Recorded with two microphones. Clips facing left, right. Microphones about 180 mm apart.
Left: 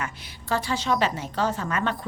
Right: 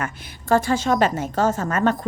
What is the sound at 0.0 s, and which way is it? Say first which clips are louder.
A woman's voice: right 4 dB; 50° right (ahead or behind).